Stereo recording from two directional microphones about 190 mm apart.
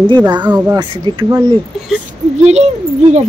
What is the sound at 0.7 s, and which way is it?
Speech, 25° right (ahead or behind).